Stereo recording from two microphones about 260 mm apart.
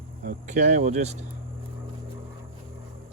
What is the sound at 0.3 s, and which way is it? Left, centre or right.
Speech, right.